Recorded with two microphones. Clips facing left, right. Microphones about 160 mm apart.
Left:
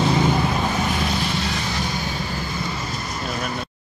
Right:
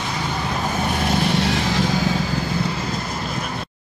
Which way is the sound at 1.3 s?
80° right.